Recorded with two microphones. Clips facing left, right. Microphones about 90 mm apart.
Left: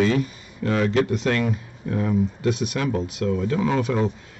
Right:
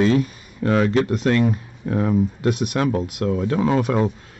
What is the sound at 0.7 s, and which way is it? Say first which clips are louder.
Speech: right 2 dB; 50° right (ahead or behind).